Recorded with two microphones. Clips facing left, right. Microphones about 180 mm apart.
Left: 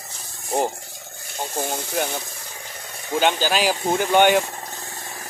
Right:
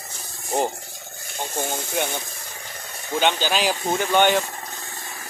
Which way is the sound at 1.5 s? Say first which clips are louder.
Left 1 dB; 5° left (ahead or behind).